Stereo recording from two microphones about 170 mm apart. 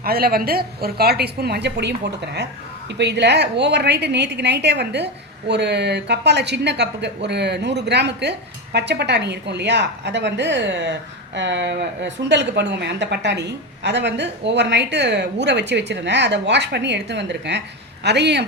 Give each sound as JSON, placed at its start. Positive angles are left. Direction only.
{"t": 0.0, "sound": "a woman's voice", "side_deg": -60}